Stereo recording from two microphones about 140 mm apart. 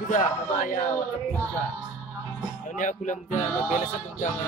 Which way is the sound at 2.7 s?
65° left (ahead or behind).